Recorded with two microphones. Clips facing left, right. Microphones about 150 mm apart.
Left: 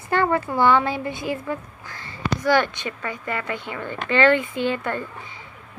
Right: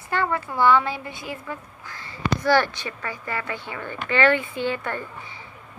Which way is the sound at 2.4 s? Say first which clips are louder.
Left 1 dB; 20° left (ahead or behind).